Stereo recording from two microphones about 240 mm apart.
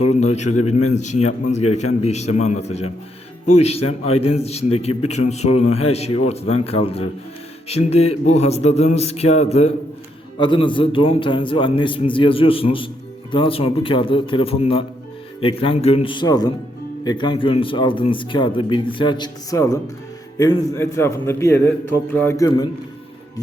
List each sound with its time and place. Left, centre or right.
0.1 s a man's voice: left
3.8 s a man's voice: left
4.2 s a man's voice: left